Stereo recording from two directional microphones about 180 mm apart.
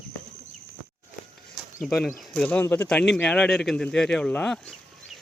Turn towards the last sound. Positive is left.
turn(degrees=5)  # may be behind; listen again after turning